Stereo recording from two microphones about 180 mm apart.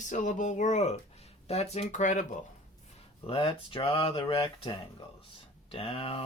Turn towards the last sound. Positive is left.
turn(degrees=30)  # may be behind; listen again after turning